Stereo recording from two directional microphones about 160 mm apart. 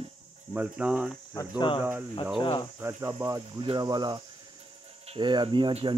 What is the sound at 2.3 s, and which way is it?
Speech, 30° left (ahead or behind).